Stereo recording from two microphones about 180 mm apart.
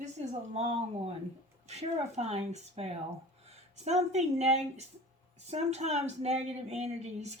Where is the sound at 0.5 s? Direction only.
35° right (ahead or behind).